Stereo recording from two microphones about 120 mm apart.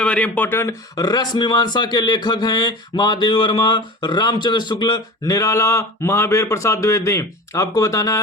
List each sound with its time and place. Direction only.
0.0 s speech: 10° left (ahead or behind); by 8.2 s 30° left (ahead or behind)